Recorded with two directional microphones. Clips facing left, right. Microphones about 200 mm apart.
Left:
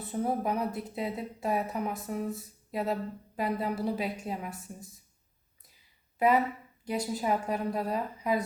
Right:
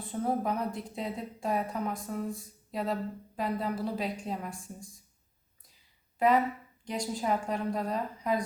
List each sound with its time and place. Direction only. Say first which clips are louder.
0.0 s speech: even; 5° left (ahead or behind)
6.1 s speech: even; 5° left (ahead or behind)